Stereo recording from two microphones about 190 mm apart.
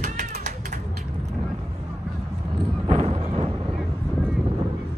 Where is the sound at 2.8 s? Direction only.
30° right (ahead or behind).